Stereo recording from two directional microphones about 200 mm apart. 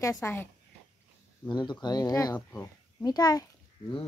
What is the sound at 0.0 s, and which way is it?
Speech, 15° left (ahead or behind).